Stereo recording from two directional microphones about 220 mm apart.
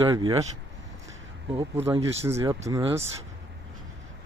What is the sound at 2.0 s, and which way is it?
Speech, 10° right (ahead or behind).